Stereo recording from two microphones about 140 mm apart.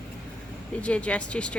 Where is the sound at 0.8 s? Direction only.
10° left (ahead or behind).